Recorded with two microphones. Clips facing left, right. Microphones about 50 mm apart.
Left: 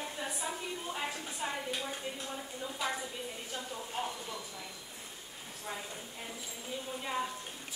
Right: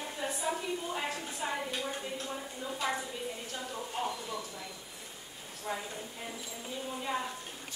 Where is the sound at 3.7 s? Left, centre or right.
Centre.